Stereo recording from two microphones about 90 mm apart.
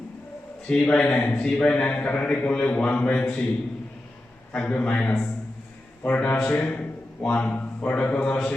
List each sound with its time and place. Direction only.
0.7 s speech: 10° left (ahead or behind)
4.5 s a man's voice: 15° left (ahead or behind)